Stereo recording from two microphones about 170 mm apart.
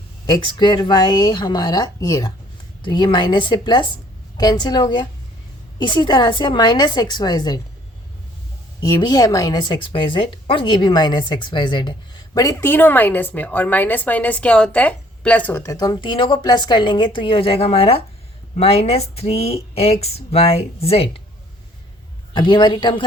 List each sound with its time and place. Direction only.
0.3 s a woman's voice: 25° left (ahead or behind)
8.8 s a woman's voice: 20° left (ahead or behind)
22.3 s a woman's voice: 30° left (ahead or behind)